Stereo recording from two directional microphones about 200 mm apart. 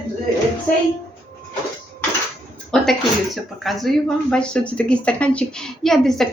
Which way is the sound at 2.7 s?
Centre (ahead or behind).